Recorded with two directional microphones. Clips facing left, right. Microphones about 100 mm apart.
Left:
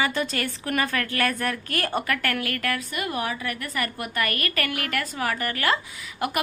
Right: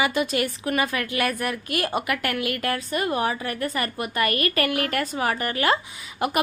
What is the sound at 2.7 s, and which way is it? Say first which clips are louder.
A woman's voice: right 4 dB; 30° right (ahead or behind).